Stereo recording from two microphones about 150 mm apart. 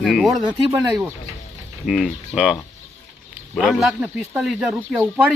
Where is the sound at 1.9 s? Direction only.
Centre (ahead or behind).